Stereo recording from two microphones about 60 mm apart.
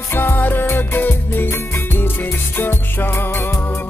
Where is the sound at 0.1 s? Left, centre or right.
Left.